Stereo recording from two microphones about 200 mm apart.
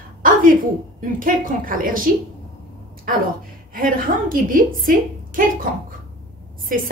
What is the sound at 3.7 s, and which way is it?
A woman's voice, 45° right (ahead or behind).